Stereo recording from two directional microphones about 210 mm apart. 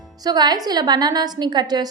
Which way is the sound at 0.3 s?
20° right (ahead or behind).